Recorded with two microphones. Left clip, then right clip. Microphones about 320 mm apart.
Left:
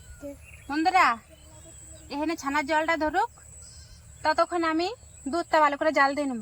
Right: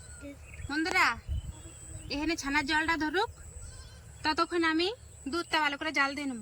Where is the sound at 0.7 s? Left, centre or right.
Centre.